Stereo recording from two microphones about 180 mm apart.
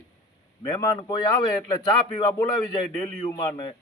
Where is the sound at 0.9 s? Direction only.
25° left (ahead or behind).